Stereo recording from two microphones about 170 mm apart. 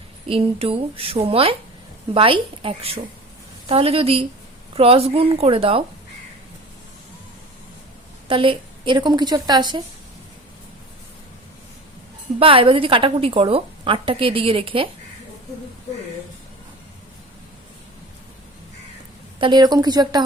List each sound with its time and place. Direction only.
0.3 s a woman's voice: 35° right (ahead or behind)
8.3 s a woman's voice: 30° right (ahead or behind)
12.4 s a woman's voice: 35° right (ahead or behind)
19.4 s a woman's voice: 25° right (ahead or behind)